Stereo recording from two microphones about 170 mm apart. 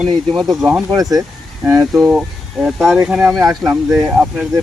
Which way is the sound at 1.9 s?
5° right (ahead or behind).